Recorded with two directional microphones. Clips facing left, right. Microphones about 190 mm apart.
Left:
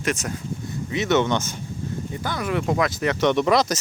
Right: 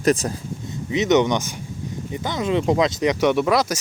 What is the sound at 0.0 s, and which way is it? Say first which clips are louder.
Speech: right 7 dB; 35° right (ahead or behind).